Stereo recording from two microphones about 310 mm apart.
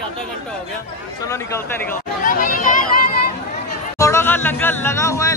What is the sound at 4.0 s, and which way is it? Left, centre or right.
Speech, centre.